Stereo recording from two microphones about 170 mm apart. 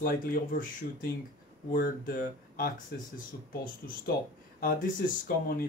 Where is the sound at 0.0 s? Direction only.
55° left (ahead or behind).